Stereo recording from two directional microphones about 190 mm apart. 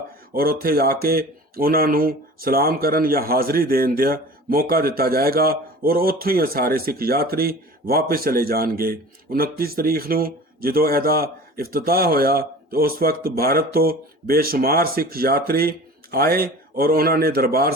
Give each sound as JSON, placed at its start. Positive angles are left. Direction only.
{"t": 0.3, "sound": "speech", "side_deg": -50}